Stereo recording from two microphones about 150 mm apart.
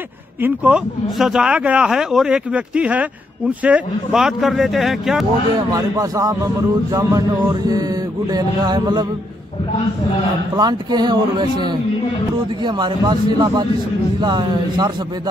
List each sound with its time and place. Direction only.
0.4 s speech: 10° right (ahead or behind)
5.7 s a man's voice: 25° right (ahead or behind)
10.5 s a man's voice: 25° right (ahead or behind)